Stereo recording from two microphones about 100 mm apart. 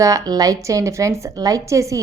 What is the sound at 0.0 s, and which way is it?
A woman's voice, 35° right (ahead or behind).